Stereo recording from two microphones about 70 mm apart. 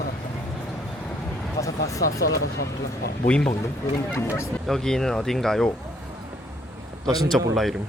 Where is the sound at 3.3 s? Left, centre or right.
Centre.